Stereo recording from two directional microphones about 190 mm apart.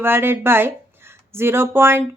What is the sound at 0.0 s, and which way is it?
Speech, 10° right (ahead or behind).